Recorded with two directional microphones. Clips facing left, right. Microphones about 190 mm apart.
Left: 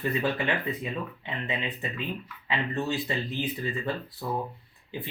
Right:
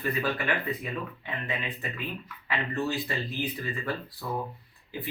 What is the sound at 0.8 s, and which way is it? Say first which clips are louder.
Speech: left 1 dB; 25° left (ahead or behind).